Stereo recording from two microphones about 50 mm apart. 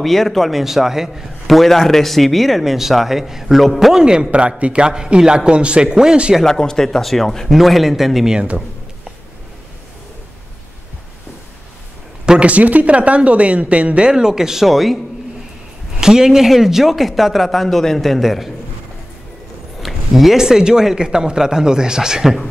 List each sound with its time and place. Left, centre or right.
0.0 s a man's voice: centre
4.0 s a man's voice: centre
6.4 s a man's voice: centre
12.3 s speech: right
14.1 s a man's voice: centre
16.0 s a man's voice: centre
19.8 s a man's voice: centre